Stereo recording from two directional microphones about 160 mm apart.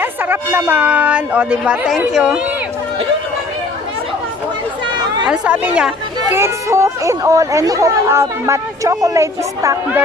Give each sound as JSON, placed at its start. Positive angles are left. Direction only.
{"t": 0.0, "sound": "speech", "side_deg": -10}
{"t": 5.3, "sound": "speech", "side_deg": -5}